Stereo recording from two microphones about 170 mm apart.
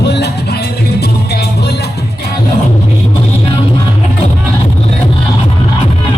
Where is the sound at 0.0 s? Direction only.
75° left (ahead or behind).